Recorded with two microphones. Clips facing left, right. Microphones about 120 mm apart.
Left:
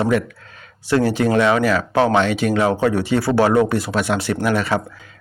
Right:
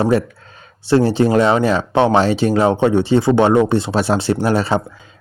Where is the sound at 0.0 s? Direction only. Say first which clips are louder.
Right 3 dB; 30° right (ahead or behind).